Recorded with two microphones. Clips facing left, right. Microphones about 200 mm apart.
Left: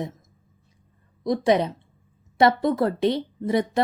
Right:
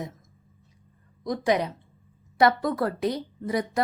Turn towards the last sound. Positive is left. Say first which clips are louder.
# left 5 dB
turn(degrees=25)  # may be behind; listen again after turning